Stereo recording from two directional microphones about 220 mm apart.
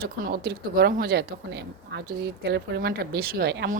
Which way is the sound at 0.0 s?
45° right (ahead or behind).